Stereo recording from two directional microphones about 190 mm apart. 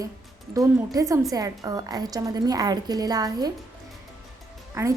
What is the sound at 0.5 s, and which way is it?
A woman's voice, 20° right (ahead or behind).